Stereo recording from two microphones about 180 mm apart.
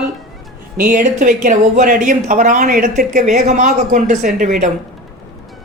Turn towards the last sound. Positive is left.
turn(degrees=-45)  # may be behind; listen again after turning